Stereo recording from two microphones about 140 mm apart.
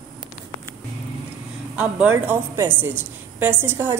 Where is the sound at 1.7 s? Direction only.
10° right (ahead or behind).